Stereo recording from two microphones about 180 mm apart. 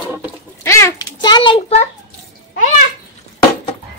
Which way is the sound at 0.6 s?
15° left (ahead or behind).